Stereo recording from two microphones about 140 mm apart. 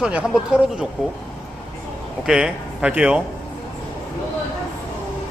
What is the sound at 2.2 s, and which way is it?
Speech, 5° right (ahead or behind).